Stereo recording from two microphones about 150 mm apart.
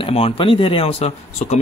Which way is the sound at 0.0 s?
40° left (ahead or behind).